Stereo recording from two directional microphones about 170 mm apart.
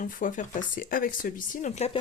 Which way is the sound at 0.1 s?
50° left (ahead or behind).